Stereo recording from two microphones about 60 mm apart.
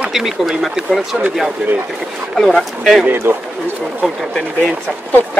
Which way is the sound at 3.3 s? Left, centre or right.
Right.